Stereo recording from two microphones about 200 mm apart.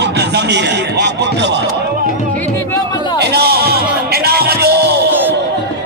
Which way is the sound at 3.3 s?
50° right (ahead or behind).